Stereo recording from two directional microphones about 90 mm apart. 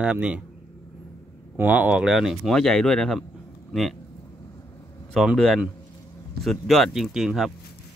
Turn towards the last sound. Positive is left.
turn(degrees=-5)  # may be behind; listen again after turning